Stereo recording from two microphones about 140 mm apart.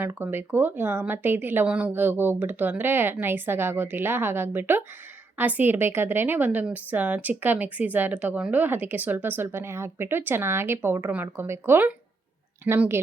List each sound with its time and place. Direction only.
0.0 s a woman's voice: 15° right (ahead or behind)